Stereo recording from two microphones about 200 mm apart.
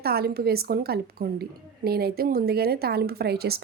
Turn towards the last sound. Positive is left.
turn(degrees=-50)  # may be behind; listen again after turning